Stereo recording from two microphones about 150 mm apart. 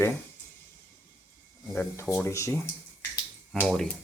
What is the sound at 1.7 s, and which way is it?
Speech, 15° left (ahead or behind).